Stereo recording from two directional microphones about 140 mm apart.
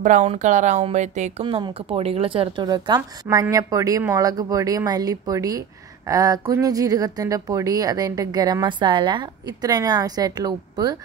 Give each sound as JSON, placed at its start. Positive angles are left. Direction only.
{"t": 0.0, "sound": "speech", "side_deg": -55}
{"t": 1.4, "sound": "speech", "side_deg": -40}